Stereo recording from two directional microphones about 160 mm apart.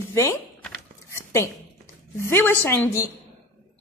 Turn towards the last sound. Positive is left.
turn(degrees=15)  # may be behind; listen again after turning